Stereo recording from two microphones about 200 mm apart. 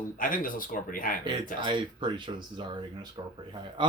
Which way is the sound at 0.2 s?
45° left (ahead or behind).